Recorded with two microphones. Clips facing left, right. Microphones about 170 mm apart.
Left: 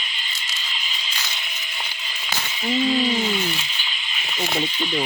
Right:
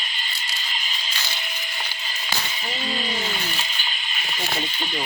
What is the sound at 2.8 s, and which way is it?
Speech, 45° right (ahead or behind).